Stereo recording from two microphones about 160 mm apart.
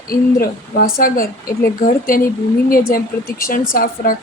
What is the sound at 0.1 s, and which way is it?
A woman's voice, 60° left (ahead or behind).